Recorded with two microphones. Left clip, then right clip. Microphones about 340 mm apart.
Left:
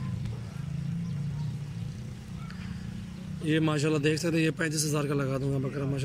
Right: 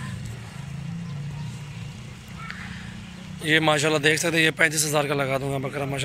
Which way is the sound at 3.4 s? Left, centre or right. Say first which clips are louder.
Right 8 dB; centre.